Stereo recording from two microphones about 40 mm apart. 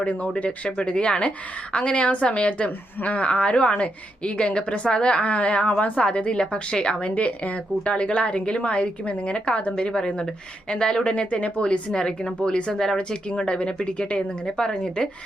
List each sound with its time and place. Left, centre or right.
0.0 s a woman's voice: left; by 7.1 s centre
7.2 s a woman's voice: left
11.1 s a woman's voice: left
11.9 s speech: centre
12.4 s a woman's voice: left
12.7 s speech: centre
13.0 s a woman's voice: left
14.7 s a woman's voice: left